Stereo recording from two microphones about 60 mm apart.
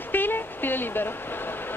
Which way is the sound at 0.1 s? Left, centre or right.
Left.